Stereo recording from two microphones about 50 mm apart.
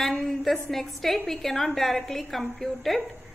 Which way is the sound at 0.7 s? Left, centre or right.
Centre.